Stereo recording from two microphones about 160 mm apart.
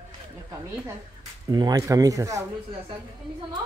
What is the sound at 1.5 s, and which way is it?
Speech, 25° right (ahead or behind).